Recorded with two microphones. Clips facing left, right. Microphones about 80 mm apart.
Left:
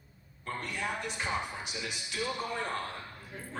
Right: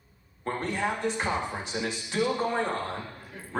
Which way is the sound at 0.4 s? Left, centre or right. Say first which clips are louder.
Right 7 dB; right.